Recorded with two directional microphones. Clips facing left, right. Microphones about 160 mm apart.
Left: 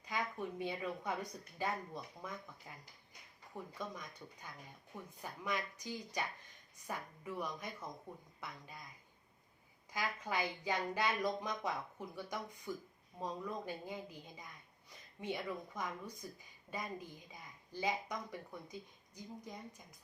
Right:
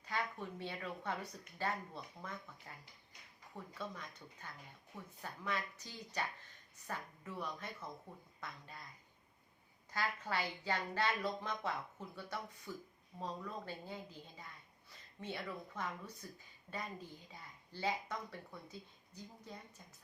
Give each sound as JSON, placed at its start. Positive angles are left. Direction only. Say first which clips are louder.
{"t": 0.0, "sound": "speech", "louder": "left 1 dB", "side_deg": 15}
{"t": 9.9, "sound": "speech", "louder": "even", "side_deg": 15}